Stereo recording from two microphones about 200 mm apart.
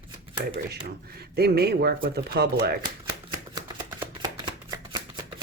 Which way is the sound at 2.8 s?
20° right (ahead or behind).